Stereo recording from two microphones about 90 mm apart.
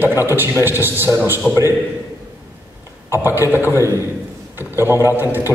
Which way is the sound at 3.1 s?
25° right (ahead or behind).